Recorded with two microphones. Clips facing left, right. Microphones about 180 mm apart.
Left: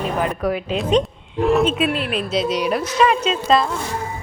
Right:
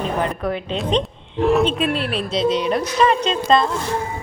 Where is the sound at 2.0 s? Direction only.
35° right (ahead or behind).